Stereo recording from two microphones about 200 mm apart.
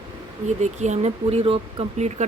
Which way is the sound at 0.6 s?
35° right (ahead or behind).